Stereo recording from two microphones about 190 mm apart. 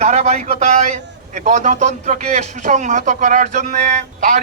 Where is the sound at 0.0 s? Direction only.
35° right (ahead or behind).